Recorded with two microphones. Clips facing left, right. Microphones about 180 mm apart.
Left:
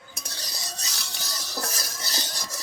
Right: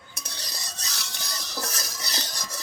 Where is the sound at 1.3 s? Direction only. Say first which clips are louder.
Left 1 dB; 5° left (ahead or behind).